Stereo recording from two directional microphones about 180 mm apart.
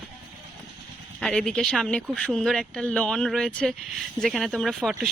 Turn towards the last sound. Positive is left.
turn(degrees=0)  # may be behind; listen again after turning